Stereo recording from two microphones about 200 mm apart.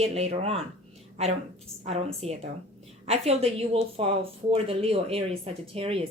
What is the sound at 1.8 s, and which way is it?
Speech, 30° right (ahead or behind).